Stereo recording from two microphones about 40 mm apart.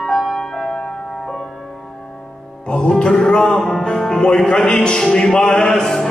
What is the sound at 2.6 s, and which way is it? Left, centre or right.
Music, left.